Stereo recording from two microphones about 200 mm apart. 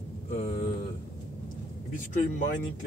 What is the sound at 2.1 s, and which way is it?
Speech, 40° left (ahead or behind).